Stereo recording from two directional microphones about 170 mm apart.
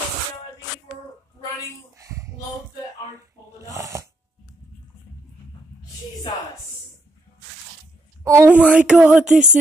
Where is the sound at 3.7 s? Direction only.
15° right (ahead or behind).